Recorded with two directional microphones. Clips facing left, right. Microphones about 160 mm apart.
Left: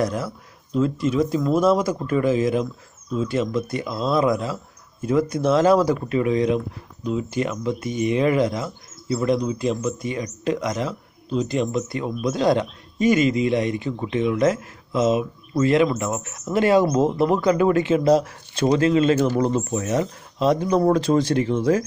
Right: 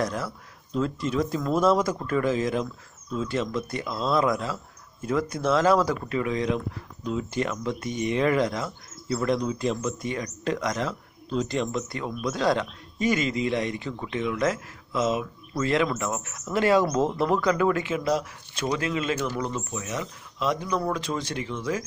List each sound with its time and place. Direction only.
0.0 s speech: 20° left (ahead or behind); by 21.8 s 40° left (ahead or behind)